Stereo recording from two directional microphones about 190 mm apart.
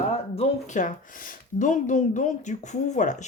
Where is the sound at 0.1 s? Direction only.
35° left (ahead or behind).